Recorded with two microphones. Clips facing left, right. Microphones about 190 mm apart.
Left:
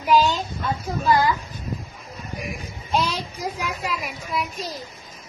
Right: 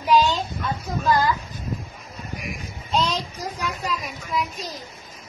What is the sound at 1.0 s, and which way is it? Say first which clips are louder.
Speech: left 1 dB; 15° left (ahead or behind).